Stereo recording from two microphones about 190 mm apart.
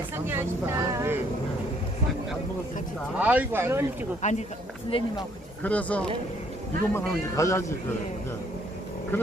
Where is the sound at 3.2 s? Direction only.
5° right (ahead or behind).